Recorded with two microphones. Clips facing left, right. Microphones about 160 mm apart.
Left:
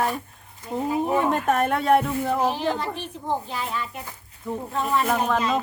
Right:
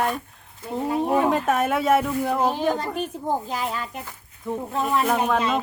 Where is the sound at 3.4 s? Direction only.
40° right (ahead or behind).